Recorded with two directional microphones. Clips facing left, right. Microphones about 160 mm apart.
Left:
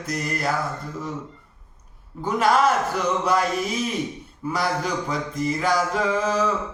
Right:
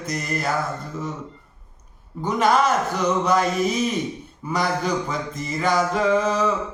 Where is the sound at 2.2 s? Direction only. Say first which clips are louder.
Even; 5° left (ahead or behind).